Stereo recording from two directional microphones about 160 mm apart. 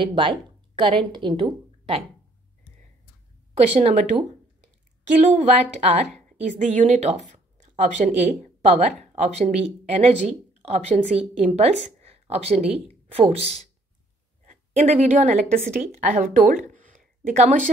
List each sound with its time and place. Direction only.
0.0 s a woman's voice: 30° right (ahead or behind)
3.7 s a woman's voice: 45° right (ahead or behind)
14.4 s a sound: 50° right (ahead or behind)
15.5 s a woman's voice: 55° right (ahead or behind)